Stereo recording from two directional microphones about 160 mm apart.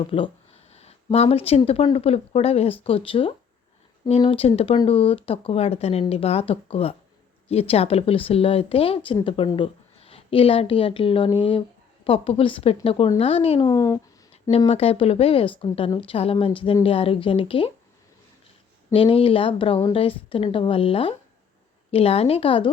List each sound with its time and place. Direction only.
0.0 s a woman's voice: 30° left (ahead or behind)
14.7 s speech: 40° left (ahead or behind)
18.9 s speech: 35° left (ahead or behind)